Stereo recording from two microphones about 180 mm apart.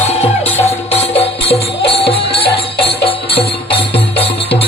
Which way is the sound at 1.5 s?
30° left (ahead or behind).